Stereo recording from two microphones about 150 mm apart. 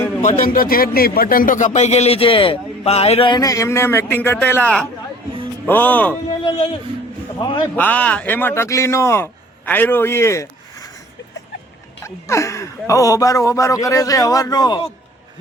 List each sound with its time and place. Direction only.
0.2 s speech: 65° left (ahead or behind); by 6.1 s 10° left (ahead or behind)
6.4 s speech: 35° left (ahead or behind)
7.8 s speech: 10° left (ahead or behind)
12.0 s speech: 20° left (ahead or behind)